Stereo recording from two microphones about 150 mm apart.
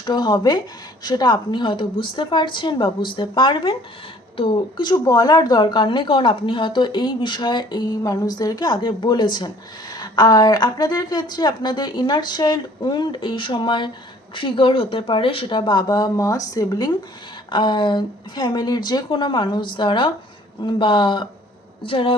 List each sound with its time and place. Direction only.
0.0 s a woman's voice: 30° left (ahead or behind)